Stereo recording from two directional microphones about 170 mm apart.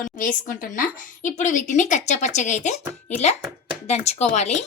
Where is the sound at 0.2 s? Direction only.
50° left (ahead or behind).